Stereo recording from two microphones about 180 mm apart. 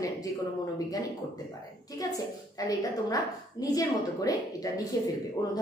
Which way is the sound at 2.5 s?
20° left (ahead or behind).